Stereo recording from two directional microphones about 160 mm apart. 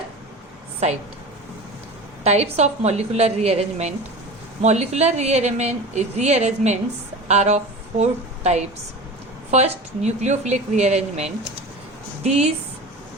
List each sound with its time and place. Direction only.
2.2 s a woman's voice: 40° right (ahead or behind)